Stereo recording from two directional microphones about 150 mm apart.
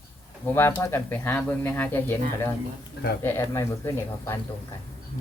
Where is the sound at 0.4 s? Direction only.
15° left (ahead or behind).